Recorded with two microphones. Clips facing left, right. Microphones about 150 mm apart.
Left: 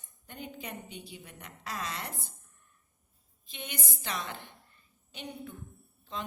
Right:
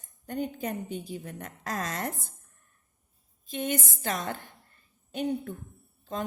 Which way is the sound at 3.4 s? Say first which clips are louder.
Right 11 dB; 45° right (ahead or behind).